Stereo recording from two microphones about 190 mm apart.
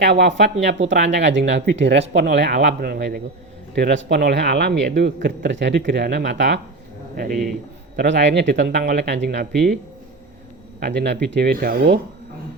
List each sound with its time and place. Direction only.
0.0 s speech: 65° right (ahead or behind)
3.8 s speech: 60° right (ahead or behind)
7.9 s speech: 65° right (ahead or behind)
10.8 s speech: 60° right (ahead or behind)